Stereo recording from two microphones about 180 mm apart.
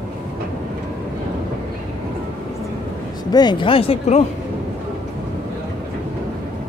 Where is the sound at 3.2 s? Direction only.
25° left (ahead or behind).